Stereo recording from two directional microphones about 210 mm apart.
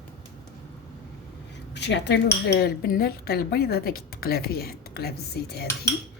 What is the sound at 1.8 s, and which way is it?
Speech, 55° left (ahead or behind).